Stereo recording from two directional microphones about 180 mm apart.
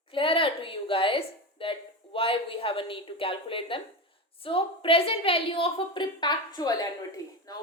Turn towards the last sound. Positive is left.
turn(degrees=20)  # may be behind; listen again after turning